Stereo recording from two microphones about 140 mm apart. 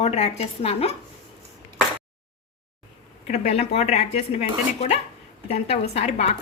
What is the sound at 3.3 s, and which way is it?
Speech, 50° left (ahead or behind).